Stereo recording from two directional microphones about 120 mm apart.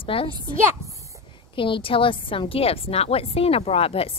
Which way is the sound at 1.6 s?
45° left (ahead or behind).